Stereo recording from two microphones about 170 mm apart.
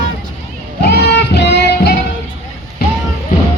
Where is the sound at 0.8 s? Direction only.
75° left (ahead or behind).